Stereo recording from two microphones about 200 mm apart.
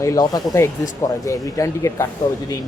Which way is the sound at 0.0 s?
15° left (ahead or behind).